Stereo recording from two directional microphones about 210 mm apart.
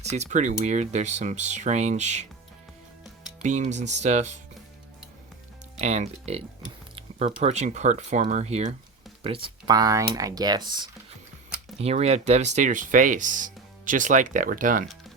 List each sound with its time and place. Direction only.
0.0 s speech: 30° right (ahead or behind)
3.4 s speech: 35° right (ahead or behind)
5.8 s speech: 35° right (ahead or behind)
11.8 s speech: 30° right (ahead or behind)